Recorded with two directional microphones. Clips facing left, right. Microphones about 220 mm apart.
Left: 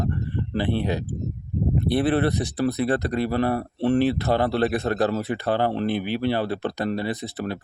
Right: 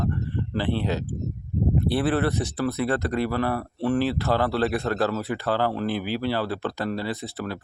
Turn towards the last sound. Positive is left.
turn(degrees=20)  # may be behind; listen again after turning